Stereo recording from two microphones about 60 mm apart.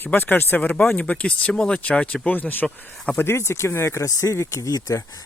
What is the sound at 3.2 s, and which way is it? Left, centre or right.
Speech, left.